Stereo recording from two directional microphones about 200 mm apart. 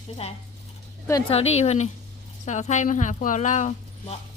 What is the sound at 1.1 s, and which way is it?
Speech, 20° left (ahead or behind).